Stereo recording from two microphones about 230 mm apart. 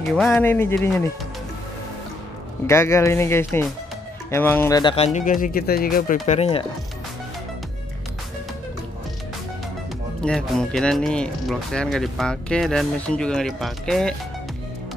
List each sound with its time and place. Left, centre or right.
0.1 s speech: centre
2.6 s speech: centre; by 6.1 s left
6.2 s speech: left
10.2 s speech: centre